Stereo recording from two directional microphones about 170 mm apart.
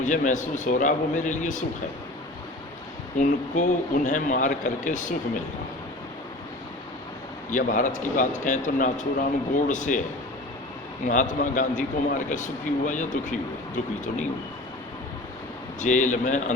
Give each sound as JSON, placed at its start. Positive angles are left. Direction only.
{"t": 0.0, "sound": "a man's voice", "side_deg": 45}
{"t": 3.2, "sound": "a man's voice", "side_deg": 50}
{"t": 7.5, "sound": "a man's voice", "side_deg": 50}
{"t": 11.0, "sound": "a man's voice", "side_deg": 45}
{"t": 15.8, "sound": "a man's voice", "side_deg": 45}